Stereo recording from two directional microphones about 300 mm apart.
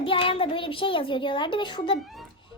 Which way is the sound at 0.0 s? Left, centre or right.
Centre.